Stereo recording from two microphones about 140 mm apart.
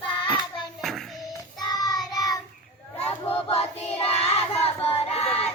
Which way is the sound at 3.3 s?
45° left (ahead or behind).